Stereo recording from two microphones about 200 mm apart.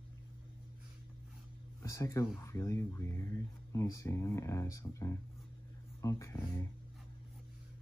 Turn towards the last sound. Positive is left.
turn(degrees=15)  # may be behind; listen again after turning